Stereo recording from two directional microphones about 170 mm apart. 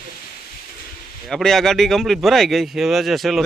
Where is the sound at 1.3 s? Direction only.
Centre (ahead or behind).